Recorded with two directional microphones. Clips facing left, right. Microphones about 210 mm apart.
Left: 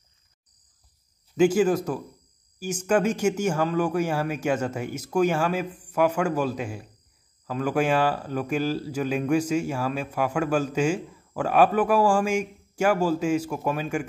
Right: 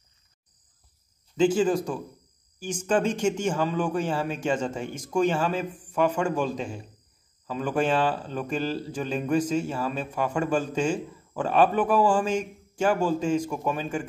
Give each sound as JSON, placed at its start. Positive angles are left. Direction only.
{"t": 1.3, "sound": "a man's voice", "side_deg": 10}